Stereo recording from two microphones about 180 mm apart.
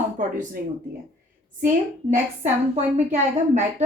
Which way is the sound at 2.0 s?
40° right (ahead or behind).